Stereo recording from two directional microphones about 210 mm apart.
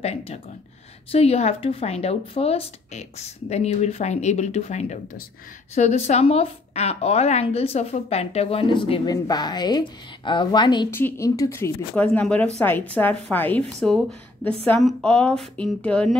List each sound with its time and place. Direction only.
0.0 s a woman's voice: 30° left (ahead or behind); by 16.2 s 5° left (ahead or behind)